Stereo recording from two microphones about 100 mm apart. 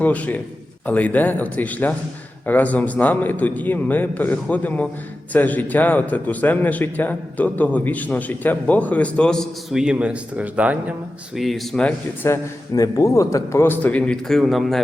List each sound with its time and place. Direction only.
0.0 s a man's voice: 15° left (ahead or behind)
9.7 s speech: 10° right (ahead or behind)
11.3 s a man's voice: centre (ahead or behind)
11.8 s a man's voice: 15° left (ahead or behind)
12.3 s a man's voice: 30° left (ahead or behind); by 14.2 s 15° left (ahead or behind)
14.3 s a man's voice: centre (ahead or behind)